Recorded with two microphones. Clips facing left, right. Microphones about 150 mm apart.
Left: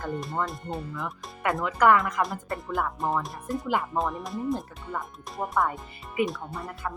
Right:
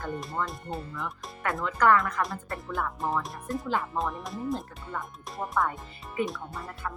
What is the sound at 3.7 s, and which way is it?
Speech, 15° left (ahead or behind).